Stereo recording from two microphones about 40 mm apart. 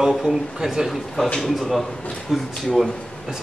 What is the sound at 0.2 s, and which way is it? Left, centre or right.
Speech, centre.